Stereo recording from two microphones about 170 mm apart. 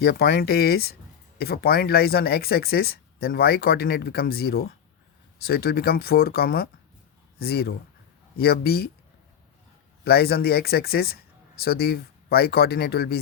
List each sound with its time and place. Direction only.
0.0 s speech: 65° left (ahead or behind)
10.0 s speech: 70° left (ahead or behind)